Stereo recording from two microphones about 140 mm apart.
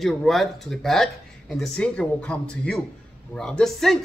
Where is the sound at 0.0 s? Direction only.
Centre (ahead or behind).